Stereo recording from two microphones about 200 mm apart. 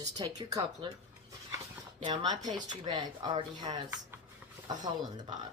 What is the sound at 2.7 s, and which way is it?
Speech, 20° right (ahead or behind).